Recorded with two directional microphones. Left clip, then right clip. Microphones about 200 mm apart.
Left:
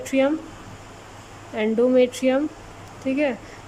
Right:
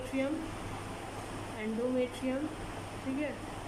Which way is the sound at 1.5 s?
50° left (ahead or behind).